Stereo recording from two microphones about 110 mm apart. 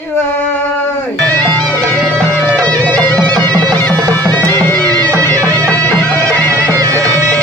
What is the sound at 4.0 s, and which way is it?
Music, 35° right (ahead or behind).